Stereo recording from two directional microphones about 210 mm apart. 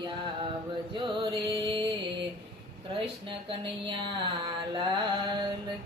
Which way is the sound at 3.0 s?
25° right (ahead or behind).